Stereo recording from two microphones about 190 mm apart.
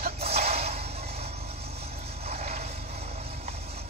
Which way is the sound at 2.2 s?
35° right (ahead or behind).